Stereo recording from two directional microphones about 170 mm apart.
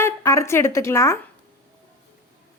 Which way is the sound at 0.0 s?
15° left (ahead or behind).